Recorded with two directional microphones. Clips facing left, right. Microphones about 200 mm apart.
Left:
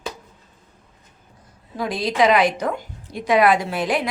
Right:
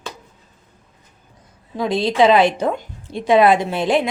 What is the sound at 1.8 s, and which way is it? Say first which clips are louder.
A woman's voice: right 4 dB; 25° right (ahead or behind).